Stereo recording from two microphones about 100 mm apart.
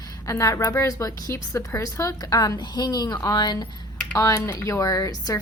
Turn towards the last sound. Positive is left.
turn(degrees=40)  # may be behind; listen again after turning